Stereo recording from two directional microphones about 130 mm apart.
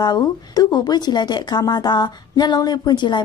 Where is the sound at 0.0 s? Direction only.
30° left (ahead or behind).